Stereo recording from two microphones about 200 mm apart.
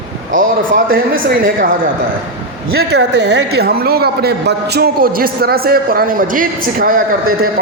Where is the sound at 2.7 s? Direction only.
60° right (ahead or behind).